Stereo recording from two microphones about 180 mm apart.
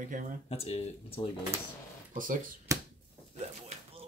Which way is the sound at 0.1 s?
50° right (ahead or behind).